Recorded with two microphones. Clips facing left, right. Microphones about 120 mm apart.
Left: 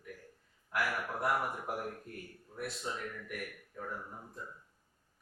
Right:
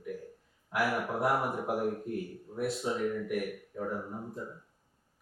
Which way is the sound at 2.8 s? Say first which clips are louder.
Right 9 dB; 15° right (ahead or behind).